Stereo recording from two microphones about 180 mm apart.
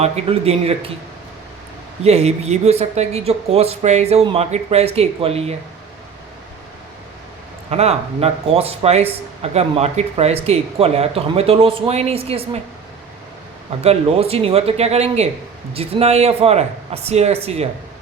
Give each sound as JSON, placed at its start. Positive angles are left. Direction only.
{"t": 0.0, "sound": "speech", "side_deg": -35}
{"t": 2.0, "sound": "speech", "side_deg": -35}
{"t": 7.7, "sound": "speech", "side_deg": -35}
{"t": 13.8, "sound": "speech", "side_deg": -35}